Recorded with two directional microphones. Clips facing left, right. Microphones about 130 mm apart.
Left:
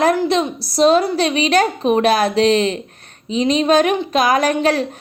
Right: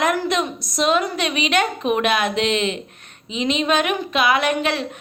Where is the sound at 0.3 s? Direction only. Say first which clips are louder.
Left 4 dB; 30° left (ahead or behind).